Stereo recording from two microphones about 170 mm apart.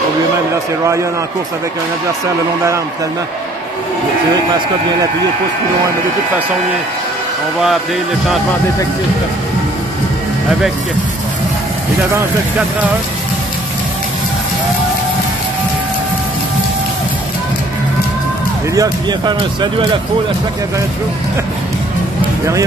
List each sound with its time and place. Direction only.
18.8 s speech: 25° right (ahead or behind)